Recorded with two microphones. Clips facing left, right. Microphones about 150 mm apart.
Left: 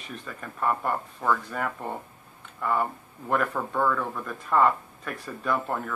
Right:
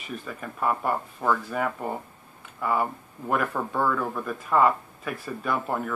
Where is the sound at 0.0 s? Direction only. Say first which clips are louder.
Right 3 dB; 5° right (ahead or behind).